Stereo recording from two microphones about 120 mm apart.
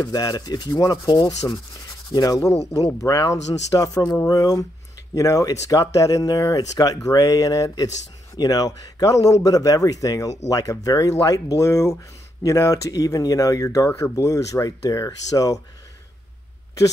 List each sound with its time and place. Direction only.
0.0 s rub: 30° left (ahead or behind)
3.0 s speech: 30° left (ahead or behind)